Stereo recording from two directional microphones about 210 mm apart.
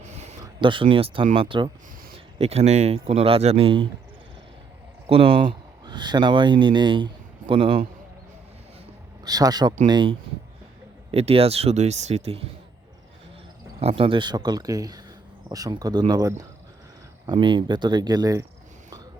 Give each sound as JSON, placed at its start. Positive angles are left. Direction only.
{"t": 0.0, "sound": "a sound", "side_deg": -35}
{"t": 0.4, "sound": "speech", "side_deg": -25}
{"t": 5.0, "sound": "speech", "side_deg": -25}
{"t": 9.2, "sound": "speech", "side_deg": -15}
{"t": 13.7, "sound": "speech", "side_deg": -25}